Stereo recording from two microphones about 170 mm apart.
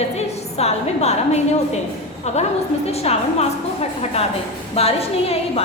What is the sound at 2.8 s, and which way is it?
Speech, 35° left (ahead or behind).